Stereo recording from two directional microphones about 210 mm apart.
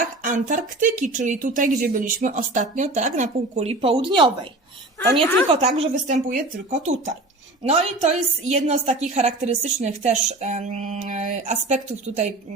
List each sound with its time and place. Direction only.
0.2 s a woman's voice: 40° right (ahead or behind); by 4.3 s 25° right (ahead or behind)
5.5 s a woman's voice: 30° right (ahead or behind)